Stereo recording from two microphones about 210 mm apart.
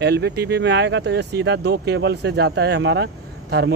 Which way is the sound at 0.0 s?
50° right (ahead or behind).